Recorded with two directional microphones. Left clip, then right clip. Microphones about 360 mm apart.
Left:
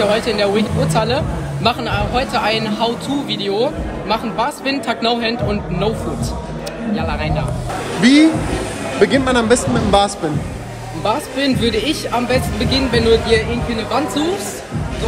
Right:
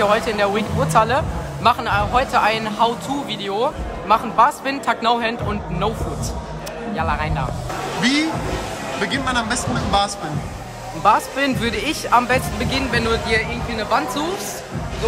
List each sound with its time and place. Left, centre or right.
0.0 s a man's voice: centre
7.0 s a man's voice: centre